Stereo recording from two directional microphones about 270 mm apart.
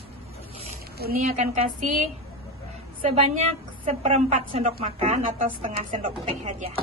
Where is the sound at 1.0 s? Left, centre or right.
Right.